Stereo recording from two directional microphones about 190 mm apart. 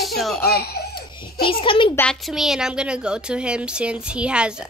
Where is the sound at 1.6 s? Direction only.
25° left (ahead or behind).